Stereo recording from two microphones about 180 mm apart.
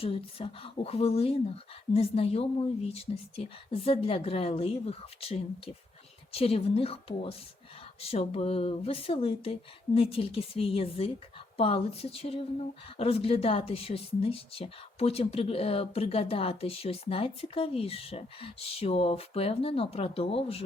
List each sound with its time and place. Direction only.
0.0 s speech: 30° left (ahead or behind)